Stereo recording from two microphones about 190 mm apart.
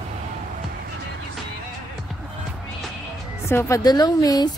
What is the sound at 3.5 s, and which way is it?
A woman's voice, 15° left (ahead or behind).